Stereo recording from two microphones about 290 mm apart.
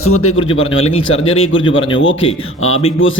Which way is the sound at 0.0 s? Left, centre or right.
Left.